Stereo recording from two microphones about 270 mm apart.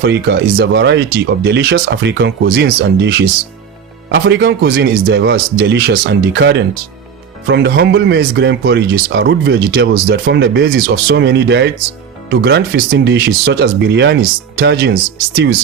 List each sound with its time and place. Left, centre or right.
0.0 s speech: right